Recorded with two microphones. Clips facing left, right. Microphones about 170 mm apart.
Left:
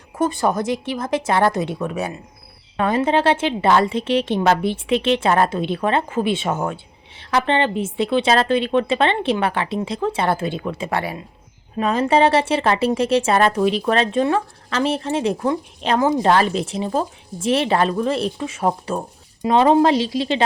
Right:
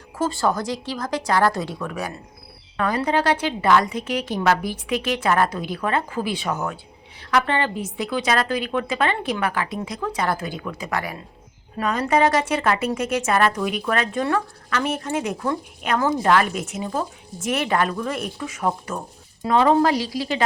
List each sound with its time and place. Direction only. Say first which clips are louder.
0.2 s a woman's voice: left 3 dB; 20° left (ahead or behind)